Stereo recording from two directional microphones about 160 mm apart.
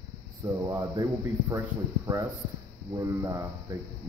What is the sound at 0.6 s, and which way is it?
Speech, 20° right (ahead or behind).